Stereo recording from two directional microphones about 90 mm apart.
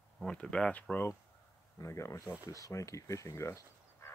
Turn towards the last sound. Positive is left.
turn(degrees=35)  # may be behind; listen again after turning